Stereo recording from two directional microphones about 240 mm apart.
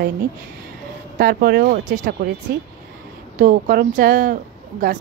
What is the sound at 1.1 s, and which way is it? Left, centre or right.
Speech, right.